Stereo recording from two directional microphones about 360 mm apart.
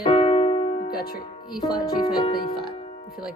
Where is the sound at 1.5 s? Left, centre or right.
Centre.